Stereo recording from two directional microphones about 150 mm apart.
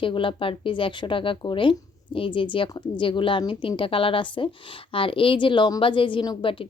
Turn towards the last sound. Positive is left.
turn(degrees=35)  # may be behind; listen again after turning